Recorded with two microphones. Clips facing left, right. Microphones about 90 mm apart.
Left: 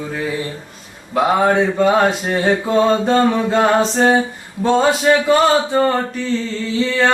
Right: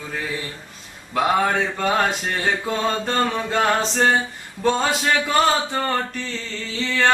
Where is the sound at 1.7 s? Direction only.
10° left (ahead or behind).